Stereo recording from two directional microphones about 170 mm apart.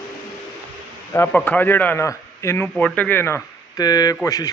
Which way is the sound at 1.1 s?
10° left (ahead or behind).